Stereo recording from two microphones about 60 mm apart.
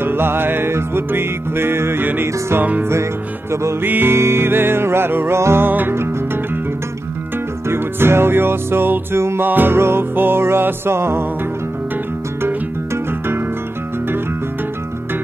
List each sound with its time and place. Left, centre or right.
0.0 s music: right
2.8 s music: right
3.8 s music: right
5.7 s music: right
7.6 s music: right
9.5 s music: right
12.4 s music: right